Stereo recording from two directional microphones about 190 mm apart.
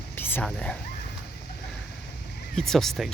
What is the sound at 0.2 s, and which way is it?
Speech, 10° left (ahead or behind).